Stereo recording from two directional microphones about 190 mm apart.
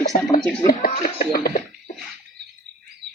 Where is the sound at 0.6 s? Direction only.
50° left (ahead or behind).